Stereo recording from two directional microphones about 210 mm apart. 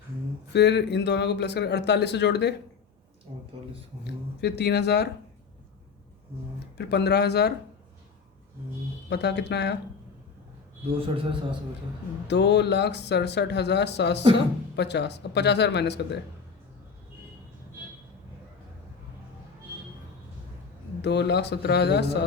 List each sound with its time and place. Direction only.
0.5 s speech: 55° left (ahead or behind)
3.3 s speech: 25° right (ahead or behind)
4.0 s speech: 50° left (ahead or behind)
6.7 s speech: 55° left (ahead or behind)
9.0 s speech: 55° left (ahead or behind)
12.3 s speech: 55° left (ahead or behind)
21.0 s speech: 55° left (ahead or behind)